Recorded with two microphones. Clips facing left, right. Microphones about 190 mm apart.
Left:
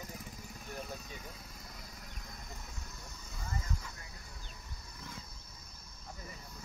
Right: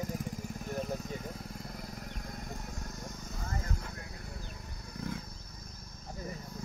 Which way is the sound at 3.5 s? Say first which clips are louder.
Right 2 dB; 55° right (ahead or behind).